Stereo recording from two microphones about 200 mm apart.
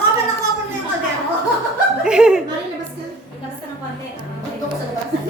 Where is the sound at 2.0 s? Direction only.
5° right (ahead or behind).